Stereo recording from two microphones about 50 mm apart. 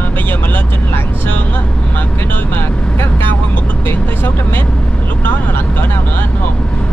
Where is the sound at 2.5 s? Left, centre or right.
Left.